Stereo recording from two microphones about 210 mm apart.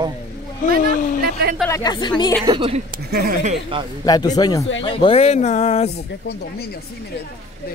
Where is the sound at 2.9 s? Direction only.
45° right (ahead or behind); by 3.9 s 30° right (ahead or behind).